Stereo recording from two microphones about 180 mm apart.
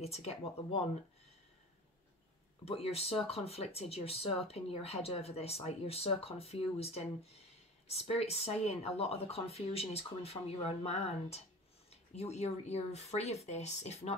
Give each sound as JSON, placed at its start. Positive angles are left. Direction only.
{"t": 0.0, "sound": "speech", "side_deg": 35}
{"t": 2.6, "sound": "speech", "side_deg": 35}